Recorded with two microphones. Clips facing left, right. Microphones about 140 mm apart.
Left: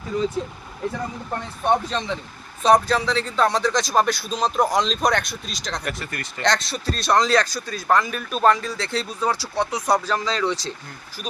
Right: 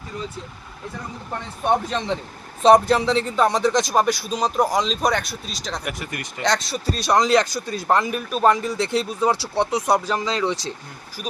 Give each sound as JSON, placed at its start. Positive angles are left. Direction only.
{"t": 1.6, "sound": "speech", "side_deg": -15}
{"t": 2.6, "sound": "speech", "side_deg": -25}
{"t": 8.3, "sound": "speech", "side_deg": -5}
{"t": 8.5, "sound": "speech", "side_deg": -20}